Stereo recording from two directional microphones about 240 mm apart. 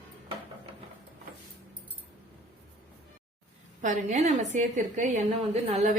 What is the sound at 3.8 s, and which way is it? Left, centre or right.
A woman's voice, right.